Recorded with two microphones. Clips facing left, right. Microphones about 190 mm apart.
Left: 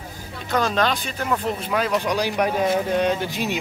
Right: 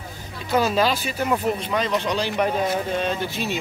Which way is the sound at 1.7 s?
5° left (ahead or behind).